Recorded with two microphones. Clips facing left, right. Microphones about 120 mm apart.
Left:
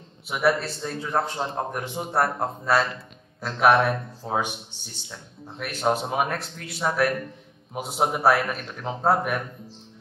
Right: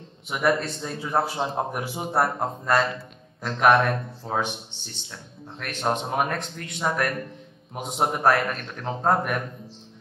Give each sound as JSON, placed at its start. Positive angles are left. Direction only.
{"t": 0.3, "sound": "a man's voice", "side_deg": 5}